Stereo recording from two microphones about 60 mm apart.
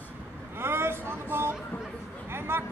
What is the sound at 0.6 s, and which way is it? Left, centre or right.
Vehicle, right.